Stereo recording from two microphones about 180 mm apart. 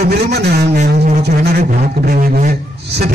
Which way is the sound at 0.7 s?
45° right (ahead or behind).